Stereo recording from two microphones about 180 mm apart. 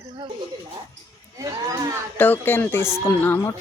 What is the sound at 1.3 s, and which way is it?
Speech, 20° right (ahead or behind).